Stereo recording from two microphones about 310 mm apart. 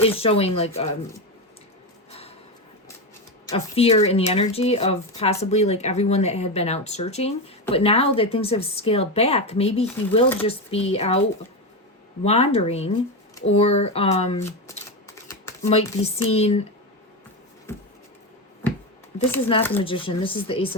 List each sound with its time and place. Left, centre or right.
0.0 s speech: centre
2.0 s a sound: centre
3.4 s speech: centre
12.2 s speech: centre
19.3 s speech: centre